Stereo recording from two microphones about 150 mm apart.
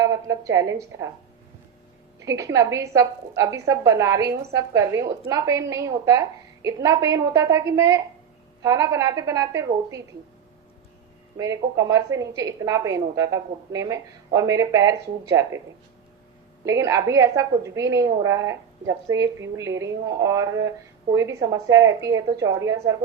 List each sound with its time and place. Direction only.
0.0 s a woman's voice: 20° right (ahead or behind)
2.1 s a woman's voice: 20° right (ahead or behind)
11.3 s a woman's voice: 20° right (ahead or behind)
16.6 s a woman's voice: 20° right (ahead or behind)